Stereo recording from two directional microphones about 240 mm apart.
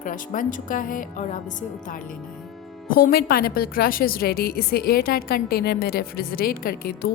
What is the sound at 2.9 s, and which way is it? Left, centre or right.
Speech, left.